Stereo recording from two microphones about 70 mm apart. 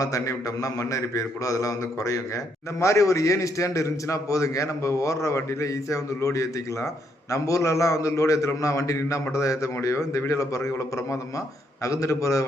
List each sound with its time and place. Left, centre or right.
0.0 s a man's voice: left